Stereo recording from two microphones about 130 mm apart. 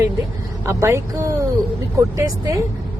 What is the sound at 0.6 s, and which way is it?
Speech, 20° right (ahead or behind).